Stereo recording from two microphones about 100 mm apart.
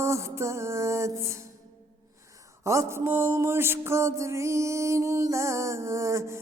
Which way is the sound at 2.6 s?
30° right (ahead or behind).